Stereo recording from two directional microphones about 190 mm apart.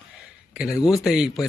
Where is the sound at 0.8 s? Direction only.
Centre (ahead or behind).